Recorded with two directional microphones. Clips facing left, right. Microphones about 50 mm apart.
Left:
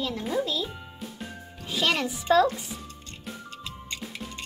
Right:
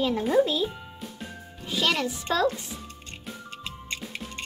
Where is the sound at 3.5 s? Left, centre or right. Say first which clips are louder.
Right 1 dB; centre.